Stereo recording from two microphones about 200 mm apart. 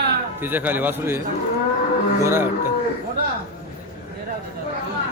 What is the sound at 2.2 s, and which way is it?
Speech, 10° right (ahead or behind).